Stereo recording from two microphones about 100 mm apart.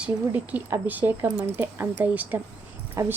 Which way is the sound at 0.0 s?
15° right (ahead or behind).